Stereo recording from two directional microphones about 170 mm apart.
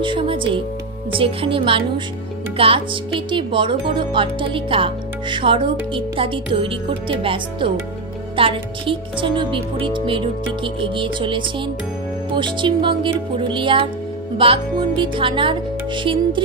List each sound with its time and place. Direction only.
0.0 s speech: 30° right (ahead or behind)